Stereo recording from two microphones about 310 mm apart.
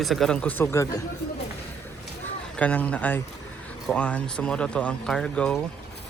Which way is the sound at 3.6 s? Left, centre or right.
Centre.